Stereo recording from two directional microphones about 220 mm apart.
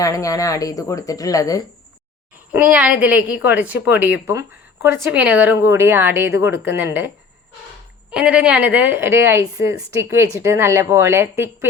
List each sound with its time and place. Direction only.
0.0 s speech: 15° left (ahead or behind)
2.5 s a woman's voice: 5° right (ahead or behind)
8.1 s a woman's voice: 5° right (ahead or behind)